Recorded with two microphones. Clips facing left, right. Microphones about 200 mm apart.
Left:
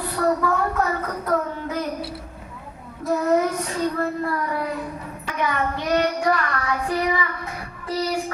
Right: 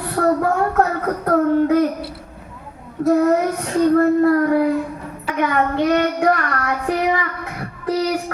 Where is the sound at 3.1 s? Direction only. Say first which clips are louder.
Right 4 dB; 55° right (ahead or behind).